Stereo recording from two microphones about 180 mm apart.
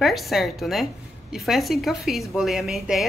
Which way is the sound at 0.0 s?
Centre (ahead or behind).